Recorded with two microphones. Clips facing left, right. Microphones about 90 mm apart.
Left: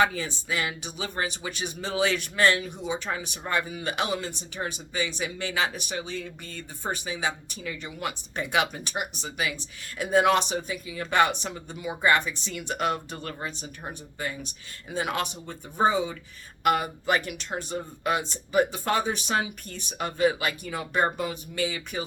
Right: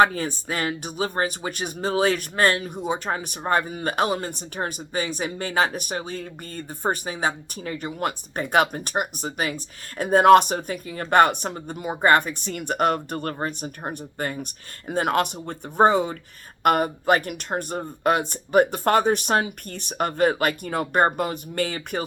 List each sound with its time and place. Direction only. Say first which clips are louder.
0.0 s speech: right 6 dB; 45° right (ahead or behind)